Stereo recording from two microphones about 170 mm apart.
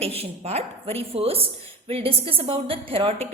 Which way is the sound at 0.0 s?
35° right (ahead or behind).